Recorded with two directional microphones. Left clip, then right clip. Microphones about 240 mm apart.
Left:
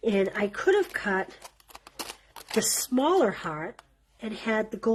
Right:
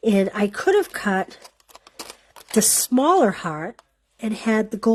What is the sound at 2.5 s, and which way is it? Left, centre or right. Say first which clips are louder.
Speech: right 7 dB; right.